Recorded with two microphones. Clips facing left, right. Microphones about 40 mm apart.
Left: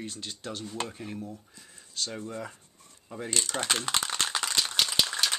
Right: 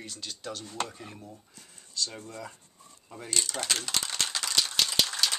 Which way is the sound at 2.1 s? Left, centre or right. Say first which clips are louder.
Left 4 dB; left.